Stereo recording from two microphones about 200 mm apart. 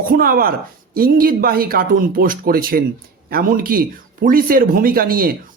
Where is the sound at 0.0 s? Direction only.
45° right (ahead or behind).